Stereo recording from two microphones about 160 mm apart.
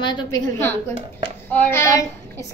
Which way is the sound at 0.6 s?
10° left (ahead or behind).